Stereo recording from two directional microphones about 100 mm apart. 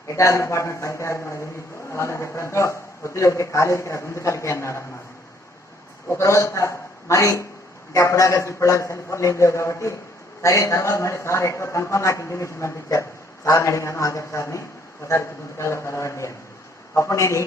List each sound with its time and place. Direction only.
0.1 s a man's voice: 30° left (ahead or behind)
6.1 s a man's voice: 30° left (ahead or behind)